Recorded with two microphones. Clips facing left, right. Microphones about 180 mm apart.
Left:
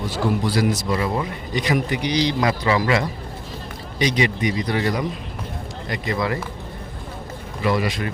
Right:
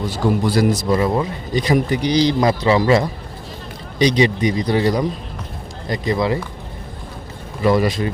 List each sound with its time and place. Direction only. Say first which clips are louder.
0.4 s a man's voice: right 5 dB; 50° right (ahead or behind)
0.7 s a man's voice: right 5 dB; 35° right (ahead or behind)
7.6 s a man's voice: right 5 dB; 40° right (ahead or behind)